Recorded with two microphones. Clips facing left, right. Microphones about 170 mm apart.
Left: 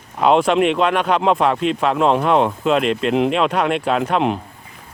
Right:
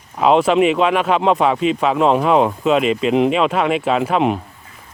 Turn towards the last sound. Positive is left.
turn(degrees=0)  # may be behind; listen again after turning